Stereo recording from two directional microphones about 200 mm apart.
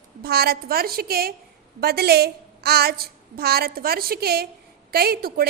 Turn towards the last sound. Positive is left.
turn(degrees=-50)  # may be behind; listen again after turning